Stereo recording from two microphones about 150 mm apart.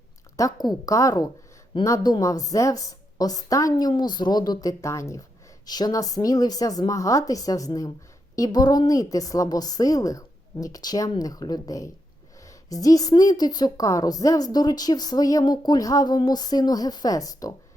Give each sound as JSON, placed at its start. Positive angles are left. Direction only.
{"t": 0.3, "sound": "a woman's voice", "side_deg": 20}